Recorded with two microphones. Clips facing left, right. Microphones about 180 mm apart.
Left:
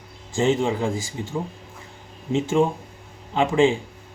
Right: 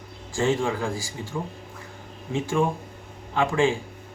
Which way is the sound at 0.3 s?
20° left (ahead or behind).